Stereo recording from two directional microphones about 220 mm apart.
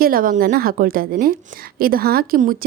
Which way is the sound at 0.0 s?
40° right (ahead or behind).